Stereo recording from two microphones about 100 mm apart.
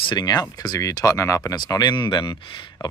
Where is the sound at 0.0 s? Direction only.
45° left (ahead or behind).